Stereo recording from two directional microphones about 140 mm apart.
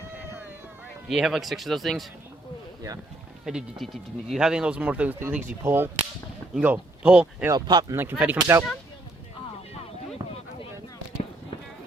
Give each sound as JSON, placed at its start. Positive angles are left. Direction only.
{"t": 1.0, "sound": "speech", "side_deg": 0}
{"t": 3.4, "sound": "speech", "side_deg": -5}
{"t": 7.4, "sound": "speech", "side_deg": -30}
{"t": 8.2, "sound": "speech", "side_deg": -15}